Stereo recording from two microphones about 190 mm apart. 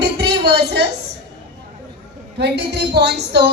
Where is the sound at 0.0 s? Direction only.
60° right (ahead or behind).